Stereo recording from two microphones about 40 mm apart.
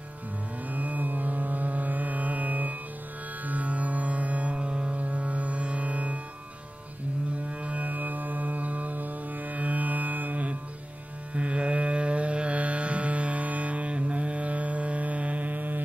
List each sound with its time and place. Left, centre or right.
0.7 s music: right
7.4 s music: right
11.3 s carnatic music: right